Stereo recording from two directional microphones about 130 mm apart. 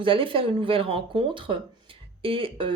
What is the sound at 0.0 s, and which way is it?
A woman's voice, 40° right (ahead or behind).